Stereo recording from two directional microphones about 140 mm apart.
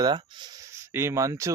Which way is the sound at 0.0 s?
30° right (ahead or behind).